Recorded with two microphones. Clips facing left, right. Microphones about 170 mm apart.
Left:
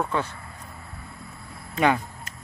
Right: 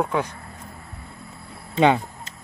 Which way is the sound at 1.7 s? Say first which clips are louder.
Right 4 dB; 25° right (ahead or behind).